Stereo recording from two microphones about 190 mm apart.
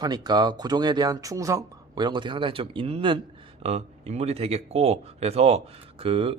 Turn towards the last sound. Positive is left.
turn(degrees=-30)  # may be behind; listen again after turning